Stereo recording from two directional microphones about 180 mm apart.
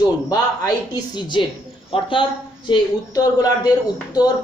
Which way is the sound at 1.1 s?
25° left (ahead or behind).